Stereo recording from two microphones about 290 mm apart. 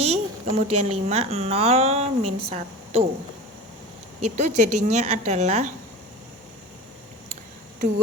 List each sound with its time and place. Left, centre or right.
0.0 s speech: right
4.4 s speech: right